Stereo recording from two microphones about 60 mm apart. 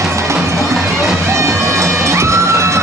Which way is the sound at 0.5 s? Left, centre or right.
Right.